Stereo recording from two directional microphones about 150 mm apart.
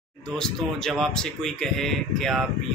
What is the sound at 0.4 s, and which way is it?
Speech, centre (ahead or behind).